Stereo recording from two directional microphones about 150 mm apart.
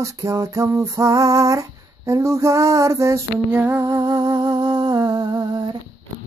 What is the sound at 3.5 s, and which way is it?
Humming, 15° right (ahead or behind).